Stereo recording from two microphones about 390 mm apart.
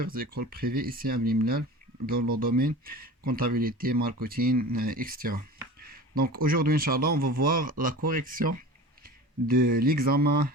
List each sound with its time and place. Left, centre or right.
0.0 s speech: right